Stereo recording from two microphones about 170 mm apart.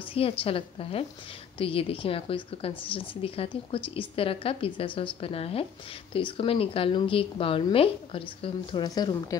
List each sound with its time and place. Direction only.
0.0 s a woman's voice: 35° left (ahead or behind)